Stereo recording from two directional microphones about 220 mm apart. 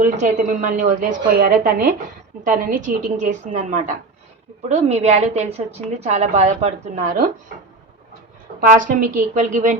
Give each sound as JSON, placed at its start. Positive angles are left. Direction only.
{"t": 0.0, "sound": "a woman's voice", "side_deg": -35}
{"t": 8.6, "sound": "a woman's voice", "side_deg": -40}